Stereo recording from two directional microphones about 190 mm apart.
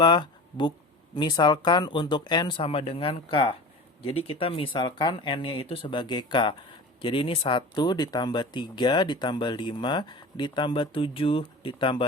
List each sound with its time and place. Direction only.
0.0 s speech: 25° left (ahead or behind)